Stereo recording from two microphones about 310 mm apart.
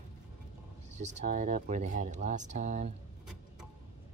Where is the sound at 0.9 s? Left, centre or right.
Right.